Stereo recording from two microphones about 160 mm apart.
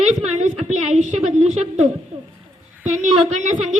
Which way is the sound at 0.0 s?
45° right (ahead or behind).